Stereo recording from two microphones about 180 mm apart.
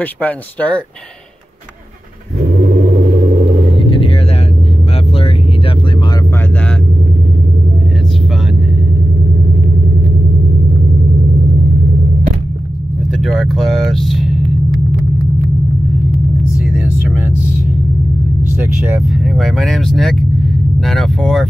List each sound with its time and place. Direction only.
0.0 s speech: 10° left (ahead or behind)
13.2 s vehicle: centre (ahead or behind)
18.6 s speech: 10° right (ahead or behind)